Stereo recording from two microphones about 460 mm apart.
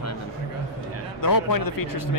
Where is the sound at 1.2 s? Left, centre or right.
Left.